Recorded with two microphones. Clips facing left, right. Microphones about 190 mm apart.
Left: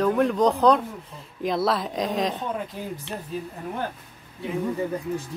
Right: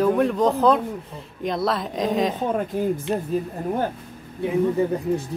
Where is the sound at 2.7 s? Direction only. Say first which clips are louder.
Right 11 dB; 50° right (ahead or behind).